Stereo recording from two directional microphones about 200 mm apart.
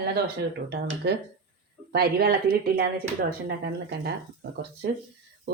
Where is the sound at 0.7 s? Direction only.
60° right (ahead or behind).